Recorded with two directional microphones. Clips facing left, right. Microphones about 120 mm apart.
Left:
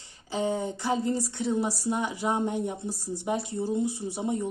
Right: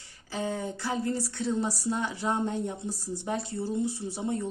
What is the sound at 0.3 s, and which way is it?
Speech, 20° left (ahead or behind).